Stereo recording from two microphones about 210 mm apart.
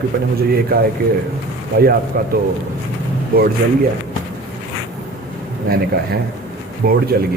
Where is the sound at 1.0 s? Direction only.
45° right (ahead or behind).